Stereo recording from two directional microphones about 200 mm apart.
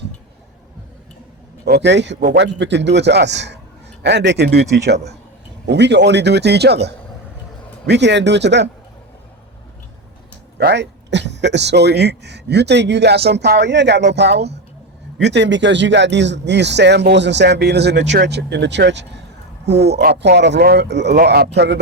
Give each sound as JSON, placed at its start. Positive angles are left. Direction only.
{"t": 1.6, "sound": "speech", "side_deg": -55}
{"t": 10.6, "sound": "speech", "side_deg": -60}